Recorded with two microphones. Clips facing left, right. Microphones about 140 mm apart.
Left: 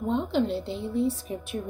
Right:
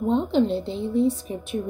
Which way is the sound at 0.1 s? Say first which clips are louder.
Right 4 dB; 20° right (ahead or behind).